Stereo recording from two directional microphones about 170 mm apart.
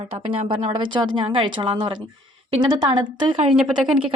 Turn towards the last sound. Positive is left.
turn(degrees=-5)  # may be behind; listen again after turning